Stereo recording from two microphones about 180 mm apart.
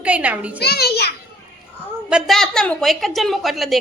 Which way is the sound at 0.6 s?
65° left (ahead or behind).